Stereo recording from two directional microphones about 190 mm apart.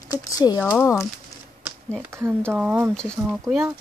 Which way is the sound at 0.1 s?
20° left (ahead or behind).